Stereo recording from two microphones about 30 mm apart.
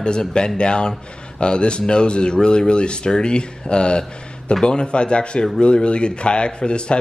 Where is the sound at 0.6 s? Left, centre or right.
Left.